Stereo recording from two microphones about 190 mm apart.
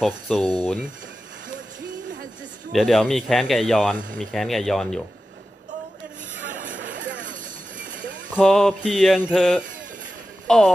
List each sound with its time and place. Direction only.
0.4 s speech: 20° right (ahead or behind)
2.7 s speech: centre (ahead or behind)
6.6 s a sound: 45° right (ahead or behind)
8.4 s speech: 5° left (ahead or behind)